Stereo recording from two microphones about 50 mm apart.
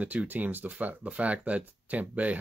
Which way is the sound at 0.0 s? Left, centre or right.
Right.